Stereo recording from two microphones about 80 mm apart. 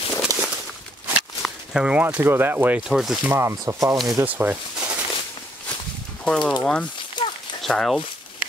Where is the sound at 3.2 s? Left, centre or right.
Right.